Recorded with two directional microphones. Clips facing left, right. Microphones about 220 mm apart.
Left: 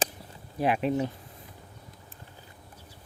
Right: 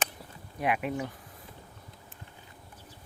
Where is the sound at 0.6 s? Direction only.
30° left (ahead or behind).